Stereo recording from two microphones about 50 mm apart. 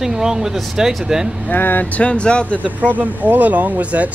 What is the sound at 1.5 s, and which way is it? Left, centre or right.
Speech, left.